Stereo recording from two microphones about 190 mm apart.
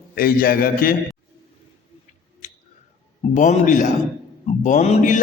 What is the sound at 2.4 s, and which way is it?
Tick, 40° left (ahead or behind).